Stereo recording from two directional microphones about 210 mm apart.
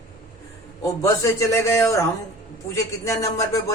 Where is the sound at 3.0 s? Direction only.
15° left (ahead or behind).